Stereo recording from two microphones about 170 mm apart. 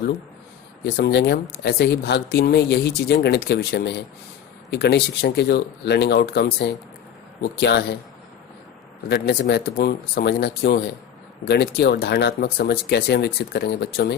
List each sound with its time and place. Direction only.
0.9 s speech: 85° left
4.7 s speech: 85° left
9.0 s speech: 80° left